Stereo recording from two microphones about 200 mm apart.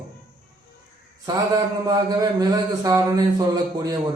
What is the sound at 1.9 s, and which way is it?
A man's voice, 20° right (ahead or behind).